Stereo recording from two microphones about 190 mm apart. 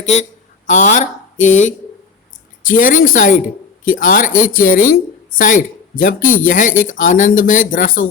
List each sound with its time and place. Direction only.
0.0 s speech: 40° left (ahead or behind)